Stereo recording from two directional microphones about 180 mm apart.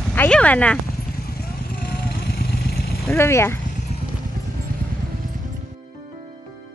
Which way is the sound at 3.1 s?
15° left (ahead or behind).